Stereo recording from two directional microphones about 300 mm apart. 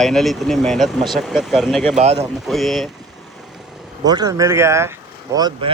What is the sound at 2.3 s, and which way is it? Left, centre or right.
Speech, centre.